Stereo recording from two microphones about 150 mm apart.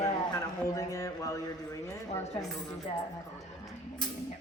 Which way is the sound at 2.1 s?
45° left (ahead or behind).